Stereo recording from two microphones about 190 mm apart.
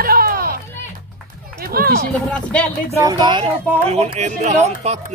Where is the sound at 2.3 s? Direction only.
5° left (ahead or behind).